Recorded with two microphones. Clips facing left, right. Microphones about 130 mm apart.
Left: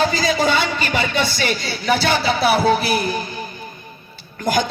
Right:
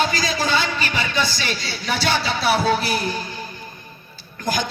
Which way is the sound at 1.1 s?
55° left (ahead or behind).